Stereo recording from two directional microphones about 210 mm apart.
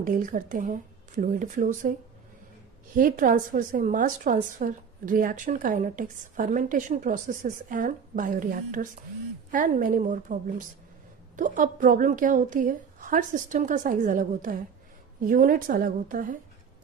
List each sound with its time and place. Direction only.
0.0 s a woman's voice: 40° right (ahead or behind)
2.9 s a woman's voice: 40° right (ahead or behind)
11.3 s a woman's voice: 40° right (ahead or behind)